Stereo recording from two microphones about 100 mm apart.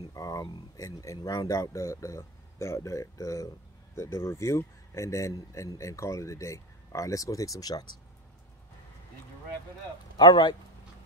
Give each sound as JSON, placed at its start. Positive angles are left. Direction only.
{"t": 0.1, "sound": "speech", "side_deg": 35}
{"t": 10.1, "sound": "speech", "side_deg": 45}